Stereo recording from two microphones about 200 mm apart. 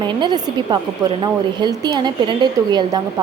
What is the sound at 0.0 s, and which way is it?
A woman's voice, 20° right (ahead or behind).